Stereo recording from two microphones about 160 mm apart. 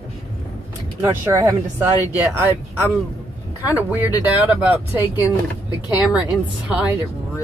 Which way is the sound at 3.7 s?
10° right (ahead or behind).